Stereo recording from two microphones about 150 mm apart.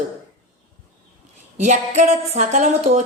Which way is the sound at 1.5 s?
55° right (ahead or behind).